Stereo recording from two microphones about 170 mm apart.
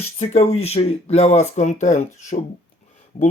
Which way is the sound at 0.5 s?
35° left (ahead or behind).